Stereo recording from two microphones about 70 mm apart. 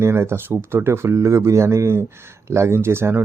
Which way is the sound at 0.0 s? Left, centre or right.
Right.